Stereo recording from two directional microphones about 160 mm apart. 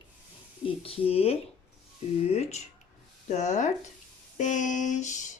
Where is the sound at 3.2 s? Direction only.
45° left (ahead or behind).